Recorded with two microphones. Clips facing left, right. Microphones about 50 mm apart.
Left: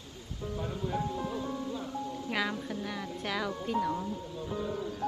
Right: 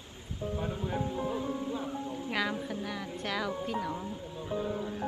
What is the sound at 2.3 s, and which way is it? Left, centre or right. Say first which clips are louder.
A woman's voice: right 1 dB; centre.